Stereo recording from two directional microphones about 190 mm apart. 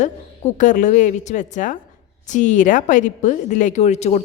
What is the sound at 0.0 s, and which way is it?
Speech, 40° left (ahead or behind).